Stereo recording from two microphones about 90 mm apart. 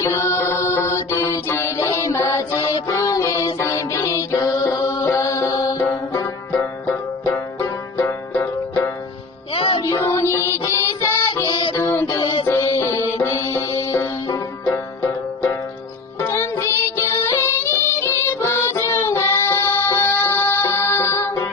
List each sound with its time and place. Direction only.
0.0 s mantra: 30° left (ahead or behind)
2.6 s music: 40° left (ahead or behind)
5.8 s music: 20° left (ahead or behind)
7.6 s banjo: 35° left (ahead or behind)
9.6 s music: 85° left
9.8 s music: 30° left (ahead or behind)
11.4 s music: 60° left (ahead or behind)
11.7 s music: 30° left (ahead or behind)
12.2 s music: 65° left (ahead or behind)
12.7 s music: 30° left (ahead or behind)
16.2 s music: 30° left (ahead or behind)